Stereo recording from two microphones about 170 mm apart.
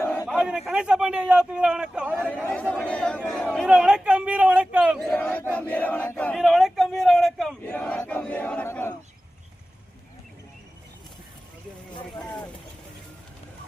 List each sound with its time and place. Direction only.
0.0 s a sound: 15° left (ahead or behind)
0.3 s battle cry: 5° right (ahead or behind)
2.2 s battle cry: 5° left (ahead or behind)
3.7 s a man's voice: 5° right (ahead or behind)
4.9 s battle cry: 5° left (ahead or behind)
12.2 s speech: 20° left (ahead or behind)